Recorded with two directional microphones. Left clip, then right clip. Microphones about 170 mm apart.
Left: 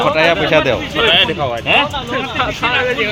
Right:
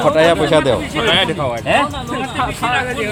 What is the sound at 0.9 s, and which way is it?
Speech, 80° right.